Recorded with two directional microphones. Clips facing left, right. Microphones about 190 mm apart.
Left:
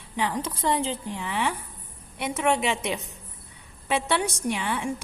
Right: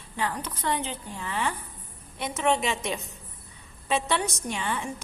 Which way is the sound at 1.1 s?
15° left (ahead or behind).